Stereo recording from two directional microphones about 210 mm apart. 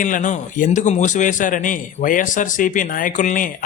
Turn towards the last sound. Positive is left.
turn(degrees=35)  # may be behind; listen again after turning